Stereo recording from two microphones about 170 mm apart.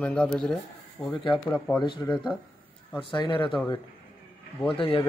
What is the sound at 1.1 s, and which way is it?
Speech, 30° left (ahead or behind).